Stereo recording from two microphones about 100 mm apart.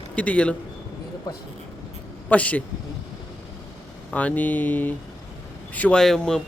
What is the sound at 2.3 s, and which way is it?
Speech, 15° left (ahead or behind).